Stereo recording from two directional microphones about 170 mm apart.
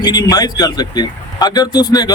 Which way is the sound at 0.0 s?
25° left (ahead or behind).